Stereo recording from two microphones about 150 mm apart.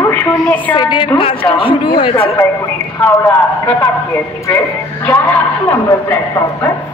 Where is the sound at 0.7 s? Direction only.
35° left (ahead or behind).